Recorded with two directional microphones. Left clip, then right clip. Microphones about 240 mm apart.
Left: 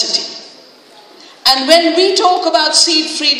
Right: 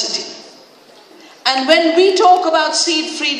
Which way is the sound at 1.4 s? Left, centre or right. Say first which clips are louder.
Left 3 dB; left.